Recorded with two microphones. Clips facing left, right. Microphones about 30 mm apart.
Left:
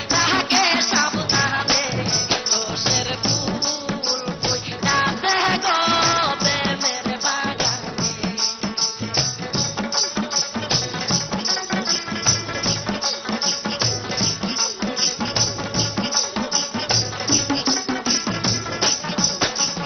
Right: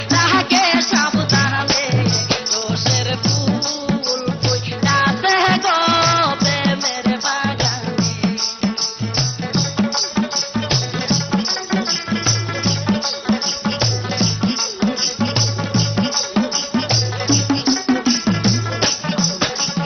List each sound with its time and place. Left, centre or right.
0.1 s music: centre
1.1 s music: right
1.4 s music: centre
9.8 s music: centre